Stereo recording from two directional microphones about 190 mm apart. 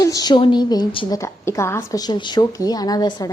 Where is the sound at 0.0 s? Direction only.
20° left (ahead or behind).